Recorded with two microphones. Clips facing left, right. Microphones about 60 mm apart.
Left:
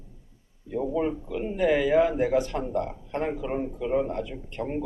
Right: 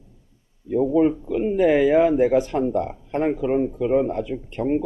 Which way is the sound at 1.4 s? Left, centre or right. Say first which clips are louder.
Right 6 dB; right.